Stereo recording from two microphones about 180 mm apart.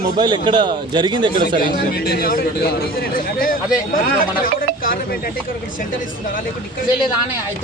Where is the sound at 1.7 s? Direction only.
55° left (ahead or behind).